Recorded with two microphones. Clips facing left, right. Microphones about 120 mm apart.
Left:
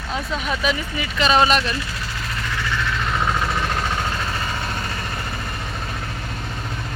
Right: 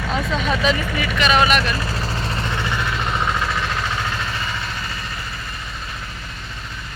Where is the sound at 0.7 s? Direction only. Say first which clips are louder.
Right 3 dB; 90° right.